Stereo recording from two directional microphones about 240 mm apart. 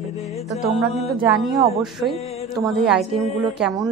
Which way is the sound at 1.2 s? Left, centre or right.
Centre.